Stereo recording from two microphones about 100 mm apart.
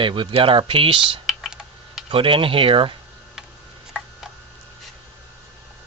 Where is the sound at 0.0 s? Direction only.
55° right (ahead or behind).